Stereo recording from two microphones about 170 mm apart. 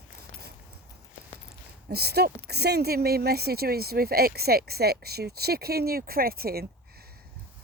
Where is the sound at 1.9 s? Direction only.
70° right (ahead or behind).